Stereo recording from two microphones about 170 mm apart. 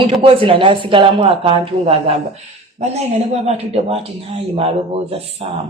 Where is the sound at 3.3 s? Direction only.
35° right (ahead or behind).